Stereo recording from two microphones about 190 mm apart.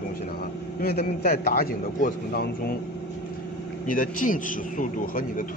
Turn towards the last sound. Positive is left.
turn(degrees=45)  # may be behind; listen again after turning